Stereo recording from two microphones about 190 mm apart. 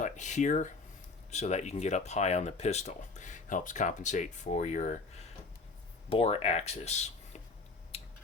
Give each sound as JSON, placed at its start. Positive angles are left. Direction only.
{"t": 0.0, "sound": "speech", "side_deg": 40}
{"t": 6.1, "sound": "speech", "side_deg": 30}
{"t": 7.9, "sound": "a sound", "side_deg": 30}